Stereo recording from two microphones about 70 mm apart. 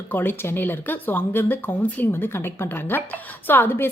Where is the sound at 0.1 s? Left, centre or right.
Left.